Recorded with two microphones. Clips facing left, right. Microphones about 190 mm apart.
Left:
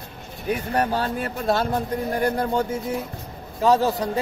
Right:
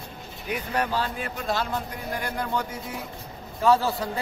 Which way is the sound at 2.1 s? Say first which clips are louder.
Left 6 dB; 35° left (ahead or behind).